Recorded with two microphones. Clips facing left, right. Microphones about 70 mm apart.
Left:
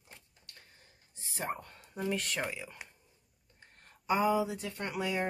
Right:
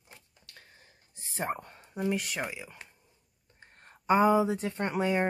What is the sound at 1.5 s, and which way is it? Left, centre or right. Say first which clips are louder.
Speech: right 4 dB; centre.